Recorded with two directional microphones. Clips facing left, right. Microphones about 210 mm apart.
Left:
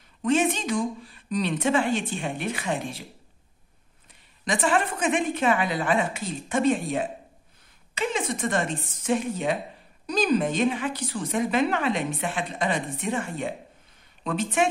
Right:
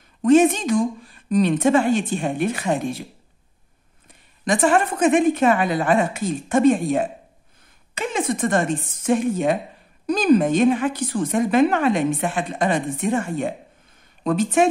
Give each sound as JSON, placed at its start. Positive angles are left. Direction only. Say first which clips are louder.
{"t": 0.2, "sound": "a woman's voice", "louder": "right 8 dB", "side_deg": -45}
{"t": 4.5, "sound": "a woman's voice", "louder": "right 6 dB", "side_deg": -45}